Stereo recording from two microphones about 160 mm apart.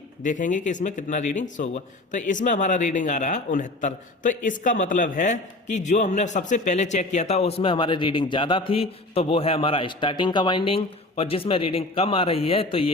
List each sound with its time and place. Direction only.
0.2 s a man's voice: 50° left (ahead or behind); by 12.9 s 35° left (ahead or behind)